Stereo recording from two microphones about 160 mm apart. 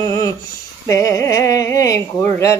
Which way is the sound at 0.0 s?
20° left (ahead or behind).